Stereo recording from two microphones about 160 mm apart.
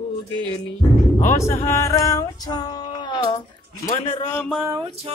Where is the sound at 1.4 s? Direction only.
20° left (ahead or behind).